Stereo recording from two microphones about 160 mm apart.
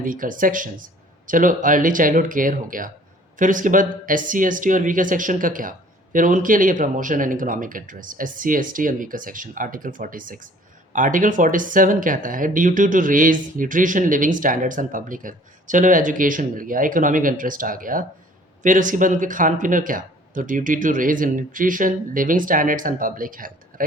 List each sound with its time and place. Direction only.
0.0 s speech: 60° right (ahead or behind)